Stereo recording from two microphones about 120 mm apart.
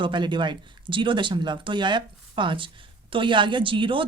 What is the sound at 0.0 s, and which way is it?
Speech, 40° right (ahead or behind).